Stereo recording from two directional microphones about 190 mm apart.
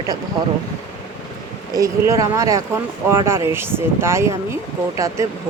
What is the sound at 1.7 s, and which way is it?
Speech, 15° right (ahead or behind).